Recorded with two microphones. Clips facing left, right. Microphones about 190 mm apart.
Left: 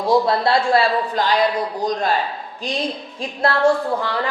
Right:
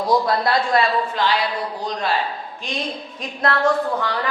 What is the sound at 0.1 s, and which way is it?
Speech, 25° left (ahead or behind).